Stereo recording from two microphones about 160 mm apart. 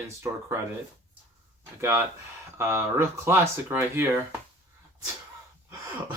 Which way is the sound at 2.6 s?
15° right (ahead or behind).